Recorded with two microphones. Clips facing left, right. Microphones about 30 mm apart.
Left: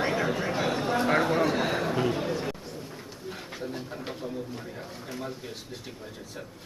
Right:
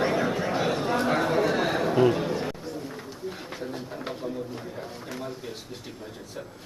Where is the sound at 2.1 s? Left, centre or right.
Centre.